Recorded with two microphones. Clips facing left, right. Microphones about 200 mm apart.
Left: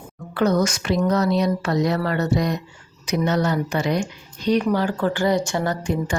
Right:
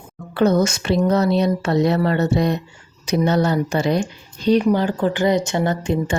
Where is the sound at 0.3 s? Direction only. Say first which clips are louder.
Right 3 dB; 25° right (ahead or behind).